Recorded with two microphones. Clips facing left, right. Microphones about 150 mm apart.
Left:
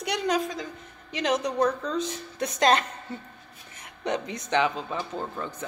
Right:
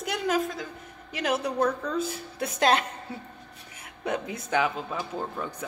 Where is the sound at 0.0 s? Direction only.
5° right (ahead or behind).